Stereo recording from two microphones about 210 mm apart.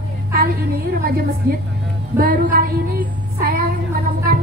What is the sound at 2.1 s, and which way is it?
Child singing, 45° right (ahead or behind).